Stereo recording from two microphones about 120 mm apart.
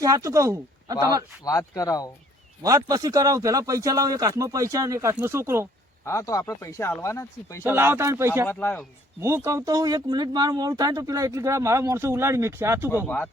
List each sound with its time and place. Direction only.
0.0 s speech: 25° right (ahead or behind)
1.5 s speech: 30° left (ahead or behind)
2.6 s speech: 30° right (ahead or behind)
6.1 s speech: 25° left (ahead or behind)
7.6 s speech: 20° right (ahead or behind)
8.4 s speech: 15° left (ahead or behind)
9.2 s speech: 20° right (ahead or behind)
13.1 s speech: 15° left (ahead or behind)